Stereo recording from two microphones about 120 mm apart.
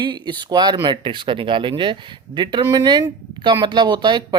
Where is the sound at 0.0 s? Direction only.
40° right (ahead or behind).